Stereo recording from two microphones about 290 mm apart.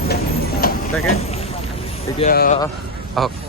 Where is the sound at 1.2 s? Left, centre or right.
Left.